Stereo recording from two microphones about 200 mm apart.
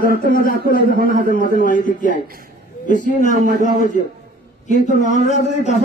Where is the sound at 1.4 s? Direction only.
45° left (ahead or behind).